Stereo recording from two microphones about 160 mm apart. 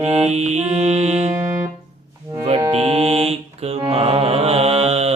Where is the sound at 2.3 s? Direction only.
20° right (ahead or behind).